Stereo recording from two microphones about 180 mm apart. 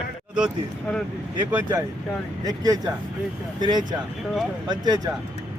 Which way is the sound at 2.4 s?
20° right (ahead or behind).